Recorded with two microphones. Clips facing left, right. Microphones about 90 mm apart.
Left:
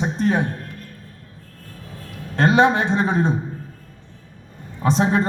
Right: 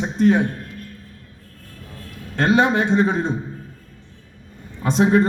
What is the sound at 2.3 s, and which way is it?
Speech, 20° left (ahead or behind).